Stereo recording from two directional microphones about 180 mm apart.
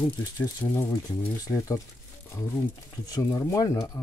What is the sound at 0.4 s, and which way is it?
Speech, 15° left (ahead or behind).